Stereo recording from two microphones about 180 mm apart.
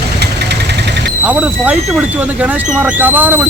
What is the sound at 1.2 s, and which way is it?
Speech, 10° right (ahead or behind).